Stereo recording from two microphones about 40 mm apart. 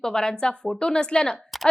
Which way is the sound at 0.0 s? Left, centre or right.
Centre.